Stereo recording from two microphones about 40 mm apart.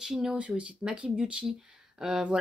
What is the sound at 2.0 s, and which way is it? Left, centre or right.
Speech, centre.